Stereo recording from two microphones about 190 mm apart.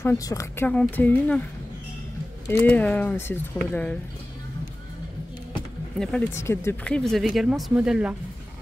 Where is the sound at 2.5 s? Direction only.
10° left (ahead or behind).